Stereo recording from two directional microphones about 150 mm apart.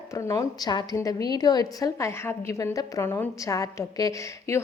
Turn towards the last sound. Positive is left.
turn(degrees=20)  # may be behind; listen again after turning